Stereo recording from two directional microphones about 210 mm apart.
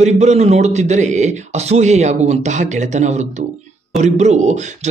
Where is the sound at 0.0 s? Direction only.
30° right (ahead or behind).